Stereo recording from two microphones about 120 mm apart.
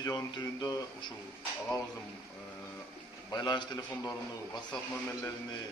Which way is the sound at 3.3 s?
40° left (ahead or behind).